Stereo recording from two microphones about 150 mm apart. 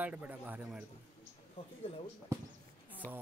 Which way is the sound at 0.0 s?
10° right (ahead or behind).